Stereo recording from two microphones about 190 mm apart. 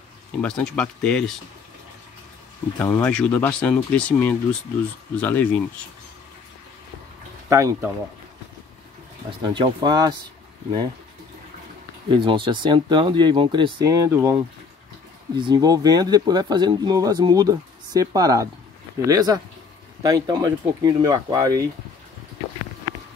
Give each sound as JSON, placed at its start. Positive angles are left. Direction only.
{"t": 0.4, "sound": "speech", "side_deg": 5}
{"t": 2.8, "sound": "speech", "side_deg": 10}
{"t": 7.4, "sound": "speech", "side_deg": -15}
{"t": 9.4, "sound": "speech", "side_deg": -25}
{"t": 12.1, "sound": "speech", "side_deg": -25}